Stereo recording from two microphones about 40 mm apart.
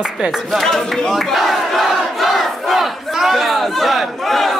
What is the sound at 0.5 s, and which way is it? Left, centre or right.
Speech, centre.